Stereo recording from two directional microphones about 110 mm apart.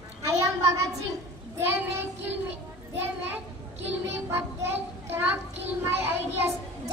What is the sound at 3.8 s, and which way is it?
Child singing, 20° right (ahead or behind).